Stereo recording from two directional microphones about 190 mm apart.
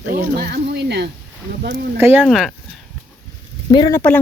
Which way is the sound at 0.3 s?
60° right (ahead or behind).